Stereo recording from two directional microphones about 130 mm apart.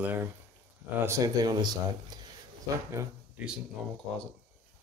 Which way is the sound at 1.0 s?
25° right (ahead or behind).